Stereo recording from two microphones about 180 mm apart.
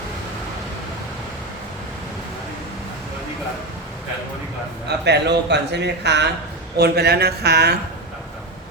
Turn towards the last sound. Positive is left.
turn(degrees=-65)  # may be behind; listen again after turning